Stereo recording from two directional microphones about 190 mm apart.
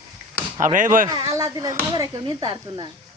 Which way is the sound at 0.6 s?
45° right (ahead or behind).